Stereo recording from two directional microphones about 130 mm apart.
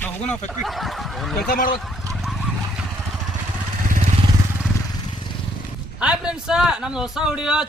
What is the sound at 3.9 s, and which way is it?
Vehicle, 85° right.